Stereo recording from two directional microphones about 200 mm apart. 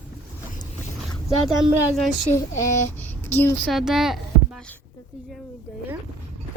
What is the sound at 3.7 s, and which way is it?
Speech, 5° right (ahead or behind).